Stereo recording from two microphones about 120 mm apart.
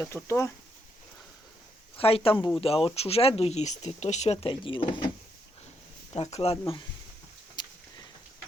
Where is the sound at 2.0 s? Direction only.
50° left (ahead or behind).